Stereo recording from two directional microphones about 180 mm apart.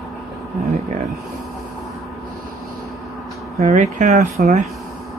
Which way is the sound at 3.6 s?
40° right (ahead or behind).